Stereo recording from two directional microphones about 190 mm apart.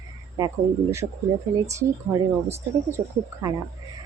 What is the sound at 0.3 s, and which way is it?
Speech, 15° right (ahead or behind).